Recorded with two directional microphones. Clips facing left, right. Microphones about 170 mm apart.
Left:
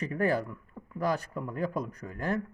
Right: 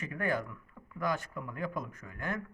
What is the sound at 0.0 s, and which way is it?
Speech, 35° left (ahead or behind).